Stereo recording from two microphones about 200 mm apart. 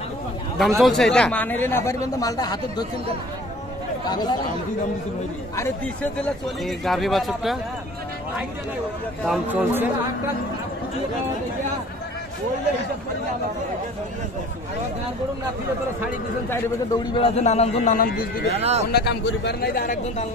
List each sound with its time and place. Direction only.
0.6 s a man's voice: centre (ahead or behind); by 2.9 s 20° left (ahead or behind)
4.1 s speech: 20° left (ahead or behind)
6.2 s a man's voice: centre (ahead or behind)
9.2 s speech: 5° right (ahead or behind)
16.4 s a man's voice: 25° left (ahead or behind)
17.9 s a man's voice: 45° left (ahead or behind)
18.5 s speech: 30° right (ahead or behind)
18.9 s a man's voice: 55° left (ahead or behind)